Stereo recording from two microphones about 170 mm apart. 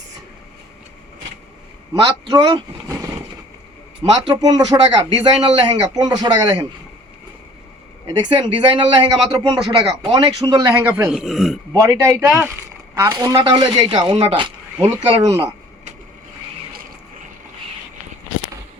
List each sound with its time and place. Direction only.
1.9 s speech: 25° right (ahead or behind)
4.1 s speech: 25° right (ahead or behind)
8.3 s a man's voice: 30° right (ahead or behind); by 11.6 s centre (ahead or behind)
11.7 s a man's voice: 20° right (ahead or behind)
12.2 s speech: 5° right (ahead or behind)
12.9 s speech: 15° right (ahead or behind)